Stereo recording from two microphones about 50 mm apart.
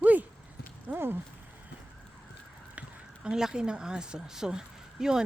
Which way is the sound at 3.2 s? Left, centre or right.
Centre.